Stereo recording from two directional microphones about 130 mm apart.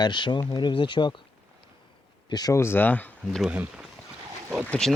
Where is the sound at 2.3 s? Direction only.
30° left (ahead or behind); by 3.4 s 10° left (ahead or behind).